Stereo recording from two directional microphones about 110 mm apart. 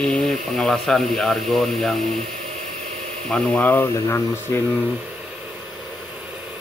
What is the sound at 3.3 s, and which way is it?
Speech, 15° left (ahead or behind).